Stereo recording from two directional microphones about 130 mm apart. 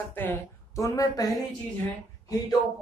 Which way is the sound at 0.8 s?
30° left (ahead or behind).